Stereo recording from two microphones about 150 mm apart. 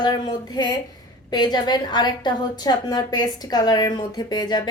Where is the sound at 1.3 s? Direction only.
30° left (ahead or behind).